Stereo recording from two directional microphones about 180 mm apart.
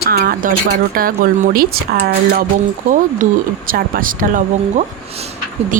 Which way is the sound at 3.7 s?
50° right (ahead or behind).